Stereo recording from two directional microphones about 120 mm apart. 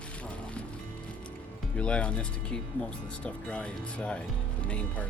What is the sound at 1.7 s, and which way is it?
Speech, 10° left (ahead or behind).